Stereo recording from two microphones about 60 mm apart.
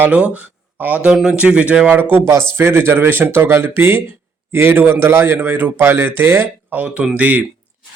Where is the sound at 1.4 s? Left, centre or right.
Right.